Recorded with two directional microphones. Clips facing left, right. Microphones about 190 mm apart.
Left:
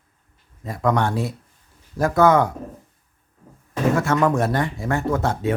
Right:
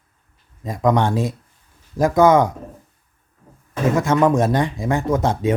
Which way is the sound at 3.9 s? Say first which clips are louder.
Right 3 dB; 20° right (ahead or behind).